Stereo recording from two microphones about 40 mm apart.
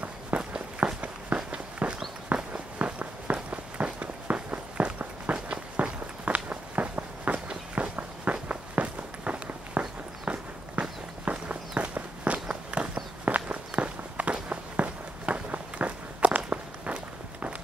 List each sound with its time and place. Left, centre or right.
0.3 s walk: right
7.3 s walk: right